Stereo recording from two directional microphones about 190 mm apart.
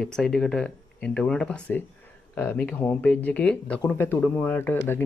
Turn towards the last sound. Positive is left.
turn(degrees=10)  # may be behind; listen again after turning